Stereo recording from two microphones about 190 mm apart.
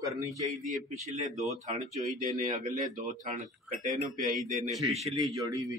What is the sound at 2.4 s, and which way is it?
Speech, 45° right (ahead or behind).